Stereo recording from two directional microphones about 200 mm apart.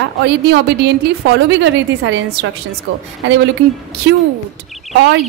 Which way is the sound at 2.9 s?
80° right.